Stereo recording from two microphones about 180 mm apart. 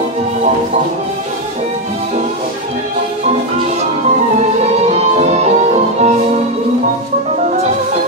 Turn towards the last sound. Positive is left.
turn(degrees=-40)  # may be behind; listen again after turning